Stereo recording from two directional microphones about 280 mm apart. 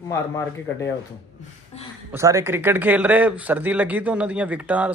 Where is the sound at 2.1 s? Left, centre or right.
Centre.